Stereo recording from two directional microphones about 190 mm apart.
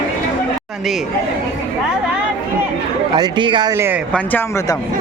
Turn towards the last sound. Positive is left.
turn(degrees=-15)  # may be behind; listen again after turning